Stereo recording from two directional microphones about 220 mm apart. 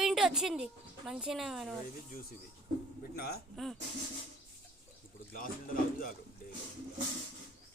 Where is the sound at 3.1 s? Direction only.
45° left (ahead or behind).